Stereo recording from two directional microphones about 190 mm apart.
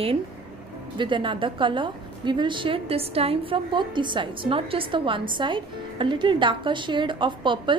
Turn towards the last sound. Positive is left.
turn(degrees=-25)  # may be behind; listen again after turning